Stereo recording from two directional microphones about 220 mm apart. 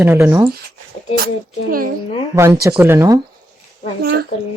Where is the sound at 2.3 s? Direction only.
10° right (ahead or behind).